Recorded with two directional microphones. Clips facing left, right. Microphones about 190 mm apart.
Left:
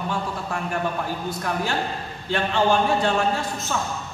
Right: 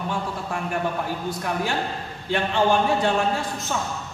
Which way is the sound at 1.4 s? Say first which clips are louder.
Left 1 dB; 15° right (ahead or behind).